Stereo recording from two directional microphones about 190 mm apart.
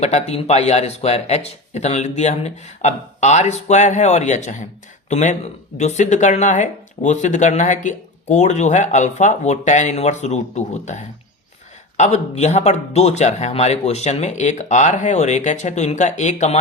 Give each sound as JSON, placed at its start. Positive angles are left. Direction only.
{"t": 0.0, "sound": "speech", "side_deg": 35}